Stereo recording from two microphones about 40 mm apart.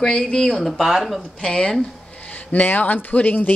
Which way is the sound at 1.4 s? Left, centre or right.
Left.